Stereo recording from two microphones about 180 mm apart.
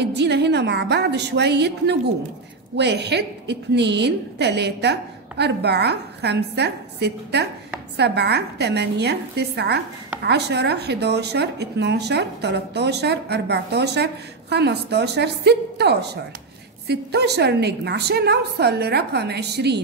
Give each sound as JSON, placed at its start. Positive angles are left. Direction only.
{"t": 0.0, "sound": "a woman's voice", "side_deg": -70}